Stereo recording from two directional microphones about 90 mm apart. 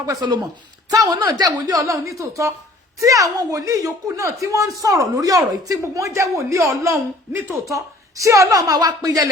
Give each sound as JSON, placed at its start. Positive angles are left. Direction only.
{"t": 0.0, "sound": "speech", "side_deg": -45}